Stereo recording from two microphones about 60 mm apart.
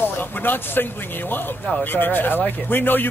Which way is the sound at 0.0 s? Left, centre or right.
Left.